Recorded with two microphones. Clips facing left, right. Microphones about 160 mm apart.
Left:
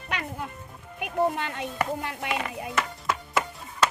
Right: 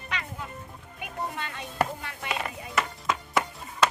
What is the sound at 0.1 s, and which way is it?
Music, 55° left (ahead or behind).